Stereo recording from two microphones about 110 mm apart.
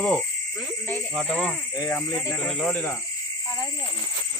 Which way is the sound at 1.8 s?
15° left (ahead or behind).